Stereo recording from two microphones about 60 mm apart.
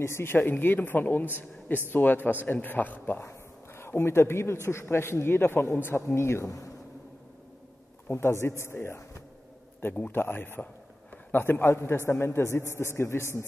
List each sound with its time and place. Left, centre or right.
0.0 s a man's voice: left
3.2 s a man's voice: left
8.1 s a man's voice: left
10.1 s a man's voice: left